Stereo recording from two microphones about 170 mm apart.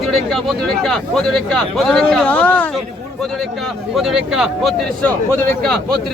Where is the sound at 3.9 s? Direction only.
5° right (ahead or behind).